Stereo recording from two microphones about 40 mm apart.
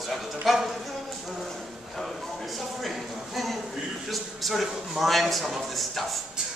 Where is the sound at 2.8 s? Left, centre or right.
Centre.